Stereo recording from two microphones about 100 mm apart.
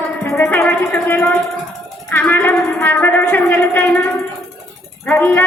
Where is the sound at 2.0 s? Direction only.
20° left (ahead or behind).